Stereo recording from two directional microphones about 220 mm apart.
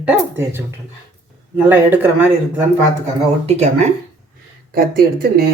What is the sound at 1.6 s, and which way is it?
Speech, 10° right (ahead or behind).